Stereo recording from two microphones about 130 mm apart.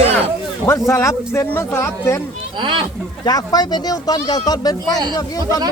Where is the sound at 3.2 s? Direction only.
30° left (ahead or behind).